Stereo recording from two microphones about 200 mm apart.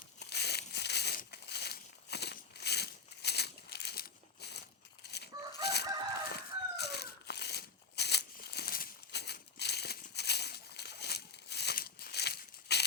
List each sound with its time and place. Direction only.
0.2 s crumpling: 55° left (ahead or behind)
5.0 s fowl: 55° left (ahead or behind)
5.6 s chicken: 55° left (ahead or behind)